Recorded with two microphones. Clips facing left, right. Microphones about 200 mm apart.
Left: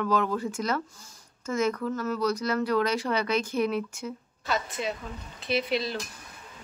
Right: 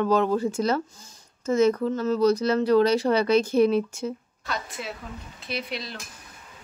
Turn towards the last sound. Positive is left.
turn(degrees=0)  # may be behind; listen again after turning